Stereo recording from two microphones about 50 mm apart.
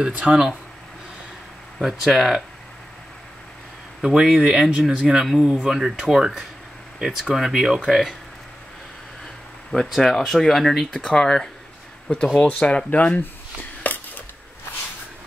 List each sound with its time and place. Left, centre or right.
0.0 s speech: right
1.8 s speech: centre
4.0 s speech: centre
5.0 s speech: centre
9.7 s speech: centre
12.4 s a sound: left